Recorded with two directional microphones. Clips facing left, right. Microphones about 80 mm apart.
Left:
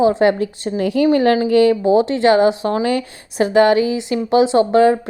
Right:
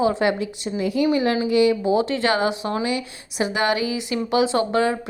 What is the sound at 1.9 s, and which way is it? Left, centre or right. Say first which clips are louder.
A woman's voice: left 7 dB; left.